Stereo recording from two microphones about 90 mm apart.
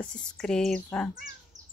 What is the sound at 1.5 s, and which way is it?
Bird, 45° right (ahead or behind).